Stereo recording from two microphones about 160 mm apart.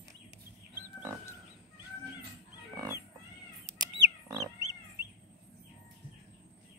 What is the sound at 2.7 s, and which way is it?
Pig, 20° right (ahead or behind).